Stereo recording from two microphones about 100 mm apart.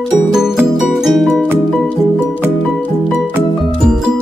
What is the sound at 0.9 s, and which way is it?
Music, centre (ahead or behind).